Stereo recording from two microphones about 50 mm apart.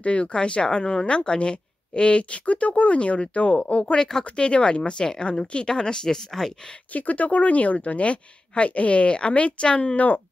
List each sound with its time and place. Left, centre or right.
0.0 s speech: left; by 6.5 s centre
6.9 s speech: left